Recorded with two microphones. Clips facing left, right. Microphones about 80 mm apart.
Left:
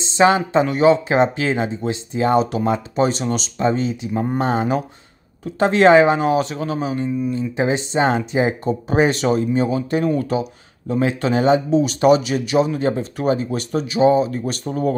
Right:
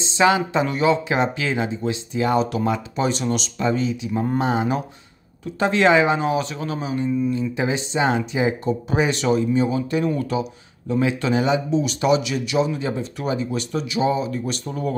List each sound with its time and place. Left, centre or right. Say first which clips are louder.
0.0 s speech: left 3 dB; left
4.1 s speech: left 1 dB; left
4.4 s speech: left 3 dB; left